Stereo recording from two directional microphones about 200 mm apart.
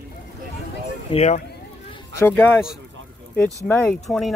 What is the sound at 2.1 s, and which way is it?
Speech, 10° left (ahead or behind).